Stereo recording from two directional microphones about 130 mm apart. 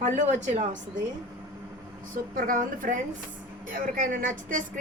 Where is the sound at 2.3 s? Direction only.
90° right.